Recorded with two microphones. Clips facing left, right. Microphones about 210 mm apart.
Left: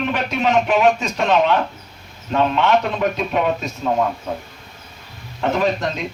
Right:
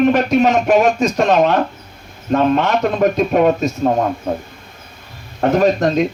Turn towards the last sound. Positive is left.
turn(degrees=-45)  # may be behind; listen again after turning